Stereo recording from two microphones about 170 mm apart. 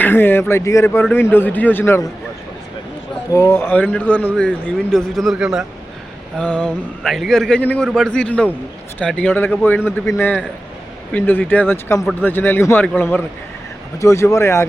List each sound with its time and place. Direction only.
0.0 s a man's voice: 10° left (ahead or behind)
3.3 s a man's voice: 15° left (ahead or behind); by 5.6 s 5° right (ahead or behind)
6.3 s a man's voice: 10° left (ahead or behind)